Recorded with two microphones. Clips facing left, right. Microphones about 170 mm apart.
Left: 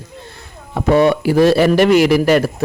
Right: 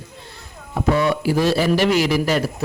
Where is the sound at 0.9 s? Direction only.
65° left (ahead or behind).